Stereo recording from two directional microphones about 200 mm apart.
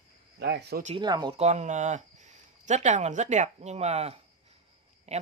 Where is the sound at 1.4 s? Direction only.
35° right (ahead or behind).